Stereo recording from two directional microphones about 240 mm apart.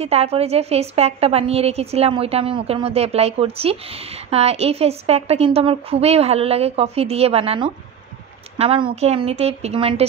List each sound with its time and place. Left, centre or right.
0.0 s a woman's voice: right